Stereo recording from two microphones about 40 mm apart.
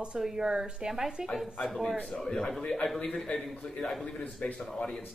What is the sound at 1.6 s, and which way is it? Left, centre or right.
A man's voice, centre.